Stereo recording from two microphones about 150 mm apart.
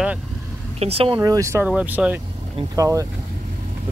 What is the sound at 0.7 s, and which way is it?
Speech, 40° right (ahead or behind).